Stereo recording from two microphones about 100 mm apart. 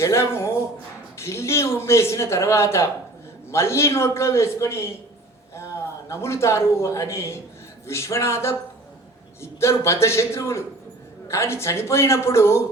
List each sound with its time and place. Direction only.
0.0 s a man's voice: 30° left (ahead or behind)
6.1 s a man's voice: 25° left (ahead or behind)